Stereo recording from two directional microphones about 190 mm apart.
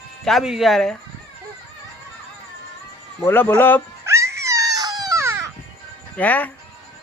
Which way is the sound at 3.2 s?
10° left (ahead or behind).